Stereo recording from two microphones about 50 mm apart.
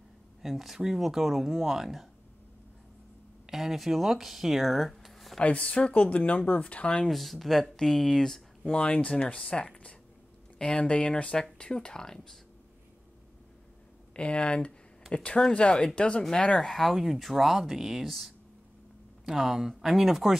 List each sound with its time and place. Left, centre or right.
0.4 s speech: centre
3.4 s speech: centre
5.4 s speech: left
7.1 s speech: centre
8.7 s speech: left
14.1 s speech: left; by 20.3 s centre